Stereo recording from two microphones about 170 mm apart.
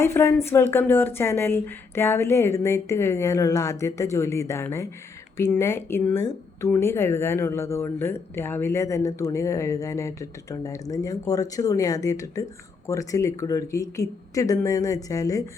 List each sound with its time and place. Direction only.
0.0 s speech: 15° left (ahead or behind)